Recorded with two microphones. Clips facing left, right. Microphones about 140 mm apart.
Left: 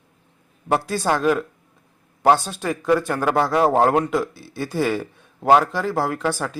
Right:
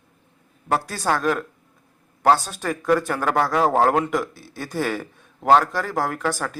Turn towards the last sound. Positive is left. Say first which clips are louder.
# left 2 dB
turn(degrees=10)  # may be behind; listen again after turning